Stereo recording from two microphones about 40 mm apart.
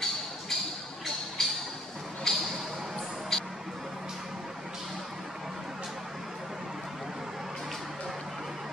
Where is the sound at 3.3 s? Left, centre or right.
Centre.